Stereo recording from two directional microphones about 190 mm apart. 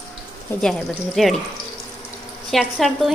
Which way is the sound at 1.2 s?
Centre (ahead or behind).